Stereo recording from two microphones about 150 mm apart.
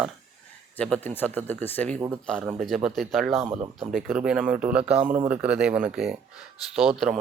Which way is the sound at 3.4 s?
30° right (ahead or behind).